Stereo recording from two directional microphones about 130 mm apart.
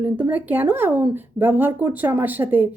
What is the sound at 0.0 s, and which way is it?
Speech, 15° right (ahead or behind).